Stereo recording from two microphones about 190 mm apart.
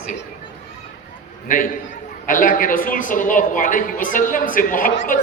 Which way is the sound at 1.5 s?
45° left (ahead or behind).